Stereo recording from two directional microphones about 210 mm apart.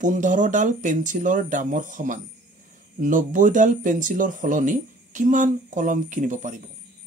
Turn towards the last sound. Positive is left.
turn(degrees=-35)  # may be behind; listen again after turning